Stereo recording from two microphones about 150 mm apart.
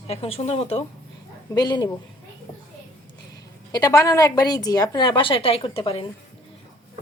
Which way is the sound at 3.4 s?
25° left (ahead or behind).